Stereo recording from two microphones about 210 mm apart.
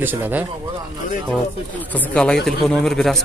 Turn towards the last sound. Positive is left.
turn(degrees=0)  # may be behind; listen again after turning